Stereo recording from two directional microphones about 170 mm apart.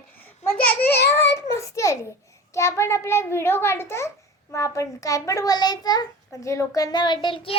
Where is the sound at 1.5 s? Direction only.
15° left (ahead or behind).